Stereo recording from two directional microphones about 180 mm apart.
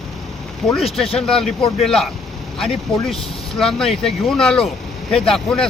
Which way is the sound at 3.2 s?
30° left (ahead or behind).